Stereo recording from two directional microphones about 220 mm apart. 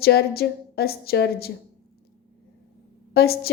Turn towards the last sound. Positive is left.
turn(degrees=45)  # may be behind; listen again after turning